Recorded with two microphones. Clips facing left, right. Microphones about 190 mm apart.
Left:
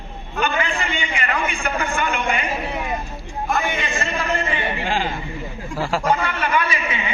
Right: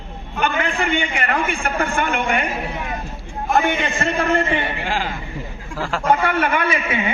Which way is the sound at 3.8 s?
60° right (ahead or behind).